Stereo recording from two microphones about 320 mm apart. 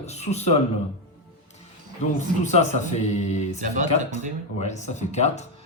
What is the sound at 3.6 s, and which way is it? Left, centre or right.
Speech, right.